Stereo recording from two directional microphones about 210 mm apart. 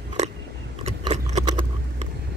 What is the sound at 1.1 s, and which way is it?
Horse, 35° right (ahead or behind).